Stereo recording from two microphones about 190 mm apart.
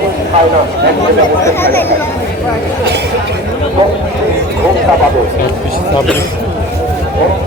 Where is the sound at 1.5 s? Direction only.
10° left (ahead or behind).